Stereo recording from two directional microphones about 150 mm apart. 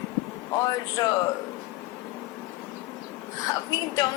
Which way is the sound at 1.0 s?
25° left (ahead or behind).